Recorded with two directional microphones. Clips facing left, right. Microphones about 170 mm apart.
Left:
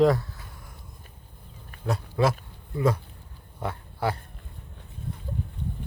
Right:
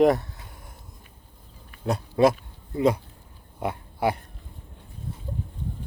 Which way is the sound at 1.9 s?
20° right (ahead or behind).